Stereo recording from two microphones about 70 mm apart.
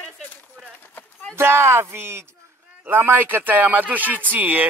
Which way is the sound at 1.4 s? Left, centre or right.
Right.